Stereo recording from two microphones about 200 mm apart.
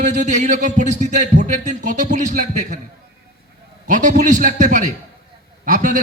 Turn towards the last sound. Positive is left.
turn(degrees=-40)  # may be behind; listen again after turning